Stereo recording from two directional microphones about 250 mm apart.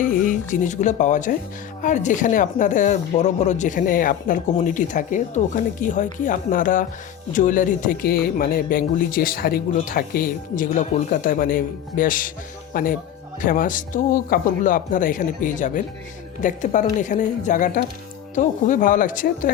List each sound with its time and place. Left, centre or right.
0.0 s speech: left